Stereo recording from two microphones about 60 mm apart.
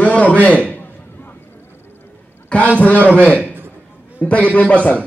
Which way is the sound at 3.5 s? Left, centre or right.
Right.